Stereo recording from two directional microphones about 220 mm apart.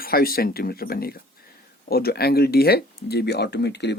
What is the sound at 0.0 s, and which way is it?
Speech, 45° left (ahead or behind).